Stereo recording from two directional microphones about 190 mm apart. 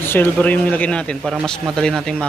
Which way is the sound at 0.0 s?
10° left (ahead or behind).